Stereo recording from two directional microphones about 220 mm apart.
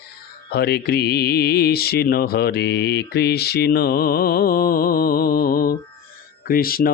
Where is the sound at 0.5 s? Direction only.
45° left (ahead or behind).